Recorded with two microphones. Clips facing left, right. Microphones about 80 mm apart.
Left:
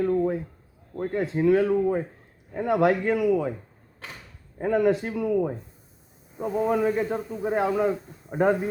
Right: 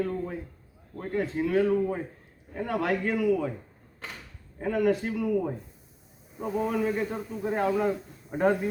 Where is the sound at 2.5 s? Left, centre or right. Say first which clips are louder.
Left 6 dB; left.